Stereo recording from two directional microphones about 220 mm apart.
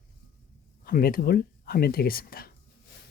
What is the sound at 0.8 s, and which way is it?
Speech, 40° left (ahead or behind).